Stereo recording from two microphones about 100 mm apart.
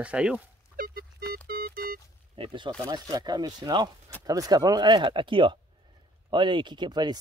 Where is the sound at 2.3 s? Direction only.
60° right (ahead or behind).